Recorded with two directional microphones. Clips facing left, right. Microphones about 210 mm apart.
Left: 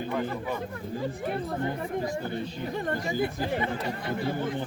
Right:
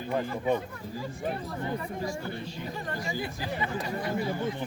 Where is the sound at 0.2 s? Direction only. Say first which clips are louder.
Right 2 dB; 25° right (ahead or behind).